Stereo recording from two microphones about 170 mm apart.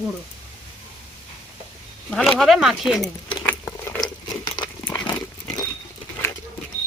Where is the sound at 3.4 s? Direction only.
15° left (ahead or behind).